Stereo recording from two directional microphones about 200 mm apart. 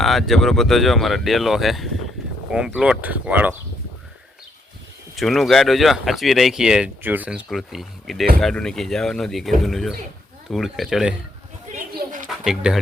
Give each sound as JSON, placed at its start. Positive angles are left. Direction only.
{"t": 0.0, "sound": "speech", "side_deg": 0}
{"t": 5.1, "sound": "speech", "side_deg": 0}
{"t": 11.9, "sound": "a sound", "side_deg": -40}
{"t": 12.5, "sound": "speech", "side_deg": 0}